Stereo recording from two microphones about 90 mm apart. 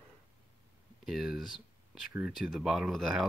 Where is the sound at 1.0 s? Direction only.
5° right (ahead or behind).